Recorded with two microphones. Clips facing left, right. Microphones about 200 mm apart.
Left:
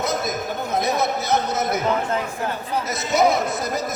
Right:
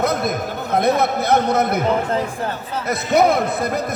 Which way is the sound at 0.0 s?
60° right (ahead or behind).